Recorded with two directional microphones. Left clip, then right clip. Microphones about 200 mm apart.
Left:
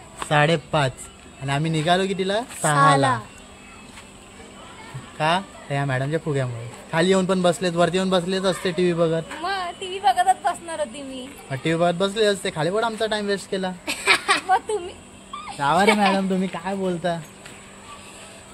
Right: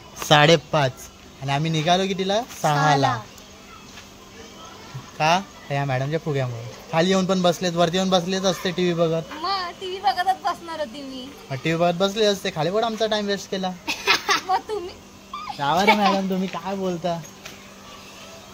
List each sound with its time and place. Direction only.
0.3 s a man's voice: 60° right (ahead or behind)
0.7 s a man's voice: 15° right (ahead or behind)
1.4 s a man's voice: 5° right (ahead or behind)
5.1 s a man's voice: 10° right (ahead or behind)
9.4 s a sound: 10° left (ahead or behind)
11.5 s a man's voice: 10° right (ahead or behind)
13.8 s a sound: 50° left (ahead or behind)
15.6 s a man's voice: 5° left (ahead or behind)